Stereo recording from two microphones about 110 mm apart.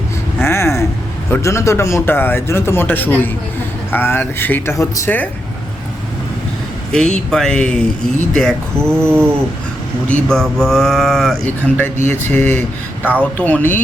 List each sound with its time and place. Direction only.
0.4 s a sound: 25° left (ahead or behind)
1.3 s a man's voice: 25° left (ahead or behind)
6.9 s speech: 5° left (ahead or behind)
8.8 s a sound: 25° right (ahead or behind)
10.1 s speech: 10° left (ahead or behind)
11.4 s speech: 10° left (ahead or behind)
12.4 s speech: 90° right
13.0 s speech: 15° right (ahead or behind)
13.3 s speech: 15° left (ahead or behind)